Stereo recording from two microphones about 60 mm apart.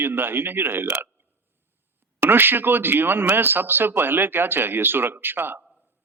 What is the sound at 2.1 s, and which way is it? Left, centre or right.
Speech, right.